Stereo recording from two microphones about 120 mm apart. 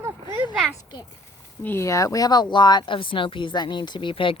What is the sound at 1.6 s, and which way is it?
Speech, 25° left (ahead or behind).